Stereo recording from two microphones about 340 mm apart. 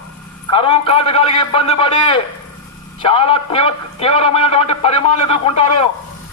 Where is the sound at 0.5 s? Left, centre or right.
Centre.